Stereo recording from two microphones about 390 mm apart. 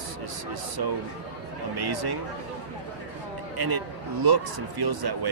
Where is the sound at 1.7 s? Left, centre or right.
Right.